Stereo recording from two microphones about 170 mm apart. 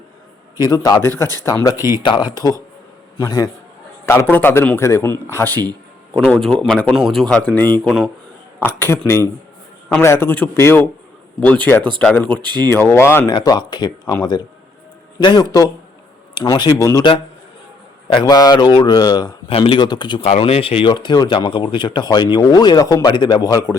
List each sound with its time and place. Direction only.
0.6 s speech: 20° left (ahead or behind); by 8.1 s centre (ahead or behind)
8.5 s speech: 10° left (ahead or behind)
12.4 s speech: 25° right (ahead or behind)
12.6 s speech: 15° left (ahead or behind)
18.1 s speech: 25° left (ahead or behind)